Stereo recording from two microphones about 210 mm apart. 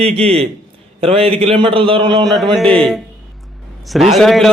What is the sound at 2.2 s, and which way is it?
Speech, centre (ahead or behind).